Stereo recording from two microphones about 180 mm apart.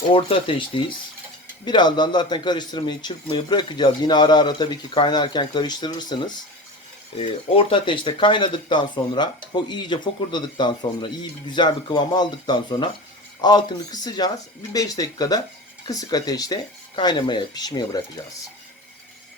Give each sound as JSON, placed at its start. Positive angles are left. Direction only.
{"t": 0.1, "sound": "a man's voice", "side_deg": 30}